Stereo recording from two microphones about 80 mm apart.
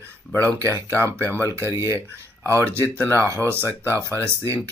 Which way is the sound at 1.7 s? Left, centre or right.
Right.